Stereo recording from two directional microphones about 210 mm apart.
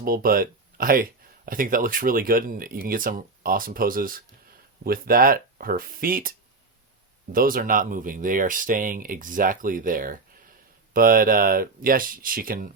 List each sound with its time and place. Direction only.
0.0 s speech: 45° right (ahead or behind)
7.3 s speech: 40° right (ahead or behind)